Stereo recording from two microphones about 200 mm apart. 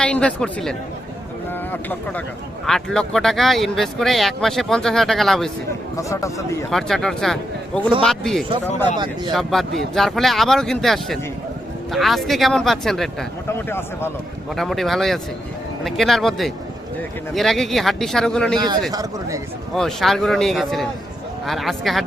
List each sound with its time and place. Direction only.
0.0 s a man's voice: 5° left (ahead or behind)
6.0 s a man's voice: 15° left (ahead or behind)
6.7 s a man's voice: centre (ahead or behind)
14.5 s speech: centre (ahead or behind)
18.9 s speech: 20° right (ahead or behind)
19.7 s speech: centre (ahead or behind)